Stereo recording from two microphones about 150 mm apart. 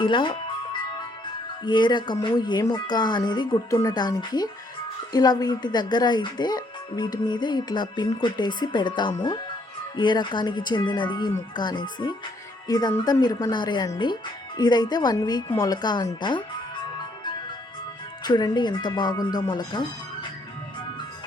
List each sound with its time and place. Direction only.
0.0 s music: 35° left (ahead or behind)
1.6 s speech: 30° left (ahead or behind)
18.2 s speech: 30° left (ahead or behind)